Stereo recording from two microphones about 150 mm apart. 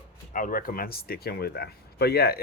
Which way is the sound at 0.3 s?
65° left (ahead or behind).